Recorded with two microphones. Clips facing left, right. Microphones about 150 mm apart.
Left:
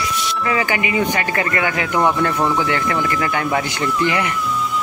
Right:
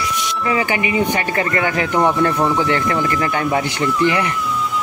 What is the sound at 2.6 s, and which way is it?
Speech, 30° right (ahead or behind).